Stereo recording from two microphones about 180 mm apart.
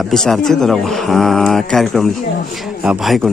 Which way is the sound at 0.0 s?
Centre (ahead or behind).